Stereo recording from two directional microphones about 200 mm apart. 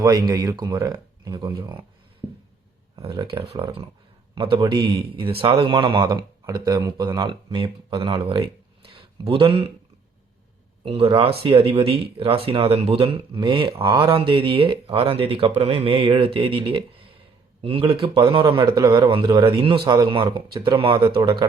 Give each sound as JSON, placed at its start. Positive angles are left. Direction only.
{"t": 0.0, "sound": "speech", "side_deg": -20}
{"t": 2.9, "sound": "speech", "side_deg": -25}
{"t": 10.8, "sound": "speech", "side_deg": -25}